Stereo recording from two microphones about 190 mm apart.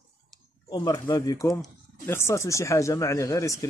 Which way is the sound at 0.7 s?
20° left (ahead or behind).